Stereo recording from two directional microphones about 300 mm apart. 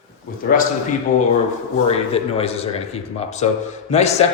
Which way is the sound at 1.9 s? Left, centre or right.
Centre.